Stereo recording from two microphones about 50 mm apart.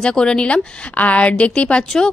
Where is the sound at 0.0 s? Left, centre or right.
Centre.